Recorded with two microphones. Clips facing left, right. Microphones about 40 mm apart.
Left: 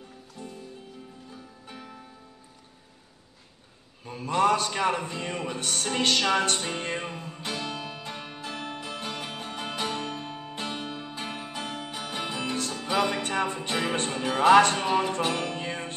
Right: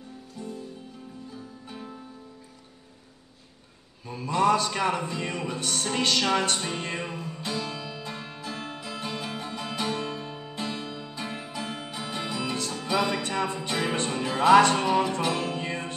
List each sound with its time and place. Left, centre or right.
4.0 s music: left